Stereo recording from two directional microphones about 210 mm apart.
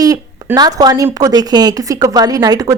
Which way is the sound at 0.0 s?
15° right (ahead or behind).